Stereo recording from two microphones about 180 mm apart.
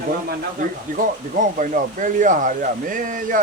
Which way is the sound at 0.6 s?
45° right (ahead or behind).